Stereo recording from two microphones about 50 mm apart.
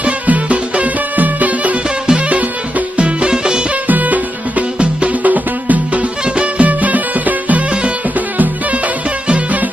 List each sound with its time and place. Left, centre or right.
0.0 s music: right
3.8 s music: right